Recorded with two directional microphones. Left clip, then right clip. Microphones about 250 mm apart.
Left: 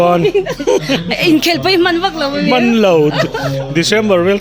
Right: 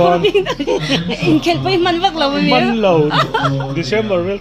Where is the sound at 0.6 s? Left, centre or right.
Left.